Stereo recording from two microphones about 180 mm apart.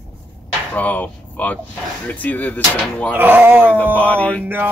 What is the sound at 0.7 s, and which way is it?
Speech, 10° left (ahead or behind).